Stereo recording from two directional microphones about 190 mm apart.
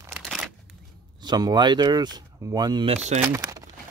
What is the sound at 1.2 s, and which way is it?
Speech, 20° right (ahead or behind).